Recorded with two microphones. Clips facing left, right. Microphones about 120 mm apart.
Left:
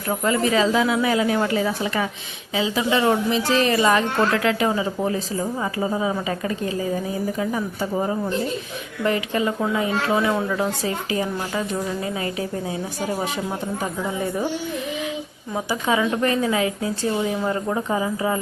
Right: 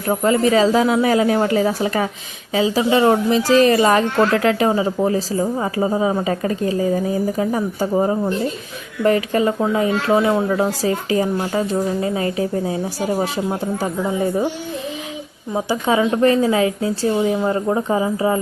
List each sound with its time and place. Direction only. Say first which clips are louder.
0.1 s a woman's voice: right 5 dB; 35° right (ahead or behind)
15.5 s a woman's voice: right 4 dB; 30° right (ahead or behind)